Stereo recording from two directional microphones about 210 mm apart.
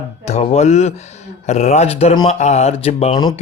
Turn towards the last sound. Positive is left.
turn(degrees=25)  # may be behind; listen again after turning